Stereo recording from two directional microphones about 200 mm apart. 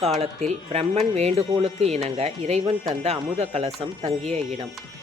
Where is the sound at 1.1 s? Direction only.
30° right (ahead or behind).